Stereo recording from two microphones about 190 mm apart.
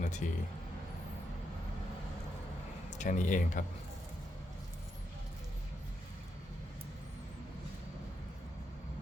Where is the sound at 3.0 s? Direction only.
40° left (ahead or behind).